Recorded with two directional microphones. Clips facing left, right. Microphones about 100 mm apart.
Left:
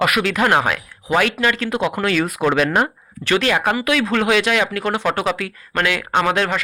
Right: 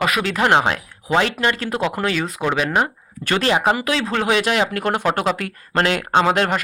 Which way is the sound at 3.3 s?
30° right (ahead or behind).